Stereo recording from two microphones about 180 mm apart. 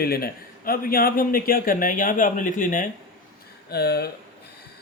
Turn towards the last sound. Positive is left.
turn(degrees=65)  # may be behind; listen again after turning